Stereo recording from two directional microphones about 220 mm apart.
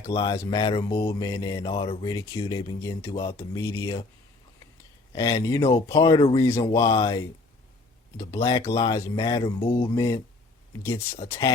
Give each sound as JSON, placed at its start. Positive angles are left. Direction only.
{"t": 0.1, "sound": "speech", "side_deg": 15}
{"t": 1.0, "sound": "mantra", "side_deg": 15}
{"t": 5.1, "sound": "mantra", "side_deg": 15}
{"t": 8.1, "sound": "speech", "side_deg": 15}
{"t": 8.4, "sound": "mantra", "side_deg": 20}
{"t": 11.3, "sound": "speech", "side_deg": 20}